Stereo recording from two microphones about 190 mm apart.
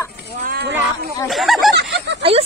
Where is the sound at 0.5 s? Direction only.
55° right (ahead or behind).